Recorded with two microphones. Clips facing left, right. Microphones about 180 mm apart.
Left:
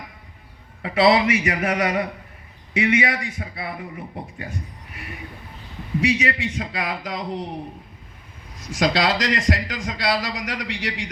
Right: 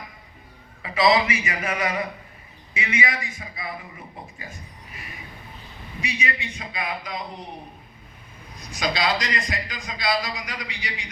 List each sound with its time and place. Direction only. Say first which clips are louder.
0.8 s speech: left 3 dB; 60° left (ahead or behind)
6.0 s a man's voice: left 8 dB; 90° left
8.6 s a man's voice: left 5 dB; 90° left